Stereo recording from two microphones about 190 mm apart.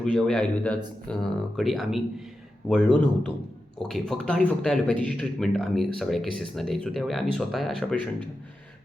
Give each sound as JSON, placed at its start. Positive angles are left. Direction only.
{"t": 0.0, "sound": "a man's voice", "side_deg": 5}